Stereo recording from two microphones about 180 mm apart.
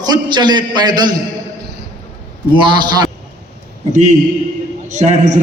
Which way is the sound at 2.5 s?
25° right (ahead or behind).